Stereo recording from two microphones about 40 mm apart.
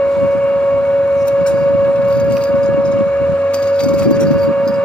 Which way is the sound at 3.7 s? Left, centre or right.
Left.